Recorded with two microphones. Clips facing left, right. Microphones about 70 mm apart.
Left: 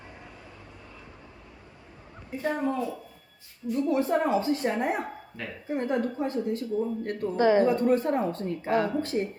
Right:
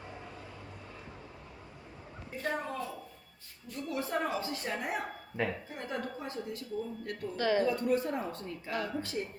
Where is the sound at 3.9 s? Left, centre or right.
Left.